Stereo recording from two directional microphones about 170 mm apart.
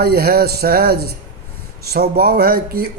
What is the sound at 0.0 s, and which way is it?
Speech, 65° right (ahead or behind).